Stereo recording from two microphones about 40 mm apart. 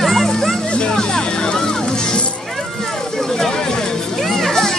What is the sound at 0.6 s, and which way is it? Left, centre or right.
Music, left.